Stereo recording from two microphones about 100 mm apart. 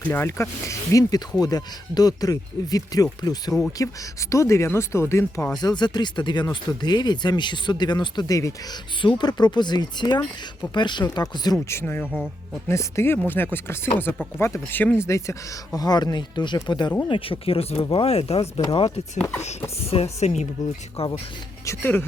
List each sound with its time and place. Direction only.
0.1 s speech: 25° left (ahead or behind)
5.5 s speech: 45° left (ahead or behind)
11.5 s speech: 25° left (ahead or behind)
15.8 s speech: 40° left (ahead or behind)
17.1 s speech: 65° left (ahead or behind)
19.8 s speech: 90° left
21.7 s speech: 20° left (ahead or behind)